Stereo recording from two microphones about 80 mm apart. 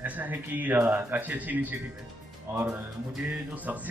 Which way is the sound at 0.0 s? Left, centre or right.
Right.